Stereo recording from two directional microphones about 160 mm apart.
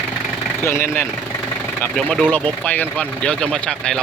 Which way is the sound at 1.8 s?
5° left (ahead or behind).